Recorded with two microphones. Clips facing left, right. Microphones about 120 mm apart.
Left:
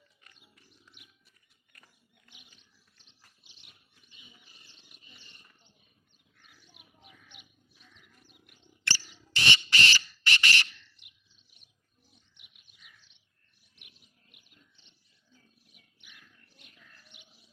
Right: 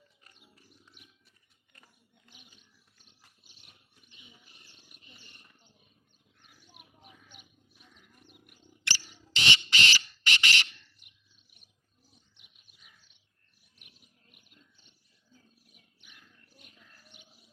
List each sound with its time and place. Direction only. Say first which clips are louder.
0.5 s wild animals: right 2 dB; 35° right (ahead or behind)
1.7 s a sound: right 1 dB; 15° right (ahead or behind)
3.0 s dog: right 1 dB; 50° right (ahead or behind)
4.9 s wild animals: right 2 dB; 60° right (ahead or behind)
7.3 s a sound: right 1 dB; 40° right (ahead or behind)
8.3 s wild animals: right 3 dB; 50° right (ahead or behind)
8.8 s a sound: left 2 dB; 15° right (ahead or behind)
13.7 s chirp: even; 40° right (ahead or behind)
14.8 s wild animals: right 1 dB; 45° right (ahead or behind)
16.7 s bird: even; 10° right (ahead or behind)